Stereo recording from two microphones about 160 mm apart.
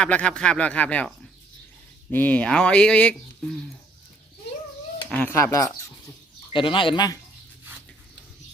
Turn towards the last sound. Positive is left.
turn(degrees=25)  # may be behind; listen again after turning